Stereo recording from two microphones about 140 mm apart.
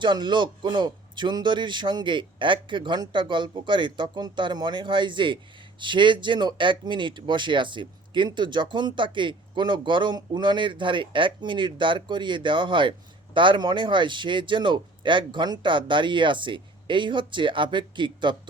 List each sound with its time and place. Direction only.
0.0 s speech: 35° right (ahead or behind)